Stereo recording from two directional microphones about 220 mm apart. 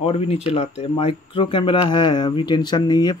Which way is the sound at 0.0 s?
25° left (ahead or behind).